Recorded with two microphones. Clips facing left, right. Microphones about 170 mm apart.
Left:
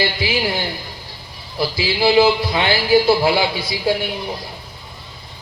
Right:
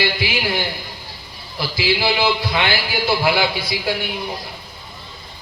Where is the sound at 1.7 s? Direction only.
30° left (ahead or behind).